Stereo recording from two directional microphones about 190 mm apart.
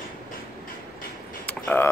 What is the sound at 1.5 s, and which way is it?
Mechanisms, 10° left (ahead or behind).